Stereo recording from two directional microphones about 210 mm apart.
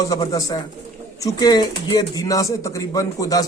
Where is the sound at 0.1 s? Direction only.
15° left (ahead or behind).